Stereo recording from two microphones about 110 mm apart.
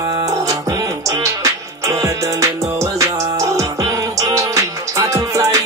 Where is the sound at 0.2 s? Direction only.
30° right (ahead or behind).